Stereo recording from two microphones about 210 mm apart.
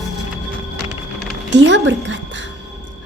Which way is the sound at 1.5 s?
55° right (ahead or behind).